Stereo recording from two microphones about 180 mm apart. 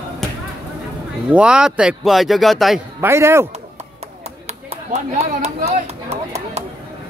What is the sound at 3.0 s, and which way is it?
Speech, 15° right (ahead or behind).